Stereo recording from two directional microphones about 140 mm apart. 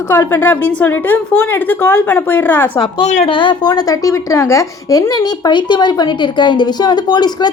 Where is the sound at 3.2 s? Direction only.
35° left (ahead or behind).